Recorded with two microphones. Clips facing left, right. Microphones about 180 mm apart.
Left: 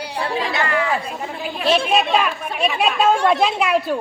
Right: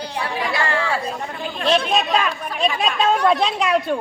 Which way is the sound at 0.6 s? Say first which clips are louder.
Left 2 dB; 30° right (ahead or behind).